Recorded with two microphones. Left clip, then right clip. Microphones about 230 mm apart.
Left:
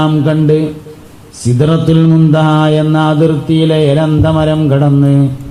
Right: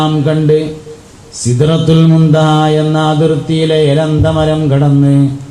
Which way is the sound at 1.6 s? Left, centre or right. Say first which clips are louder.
Even; left.